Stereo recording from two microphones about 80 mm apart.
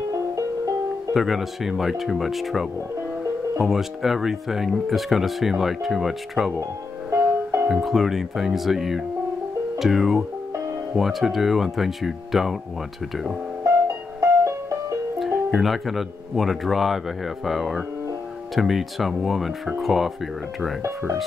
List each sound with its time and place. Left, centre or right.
1.1 s speech: centre
7.1 s music: right
7.7 s speech: centre
14.2 s music: right
15.1 s speech: centre